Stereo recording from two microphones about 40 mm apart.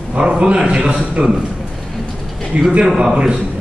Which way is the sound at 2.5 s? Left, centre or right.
Right.